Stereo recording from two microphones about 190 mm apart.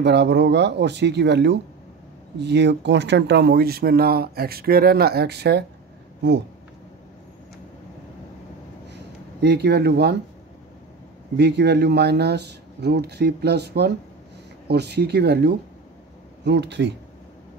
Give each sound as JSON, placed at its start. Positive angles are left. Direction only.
{"t": 0.0, "sound": "speech", "side_deg": -65}
{"t": 8.9, "sound": "a sound", "side_deg": -60}
{"t": 11.3, "sound": "speech", "side_deg": -60}